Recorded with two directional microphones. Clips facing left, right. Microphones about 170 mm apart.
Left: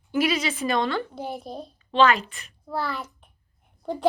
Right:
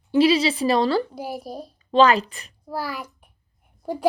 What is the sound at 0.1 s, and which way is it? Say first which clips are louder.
Speech: right 7 dB; 30° right (ahead or behind).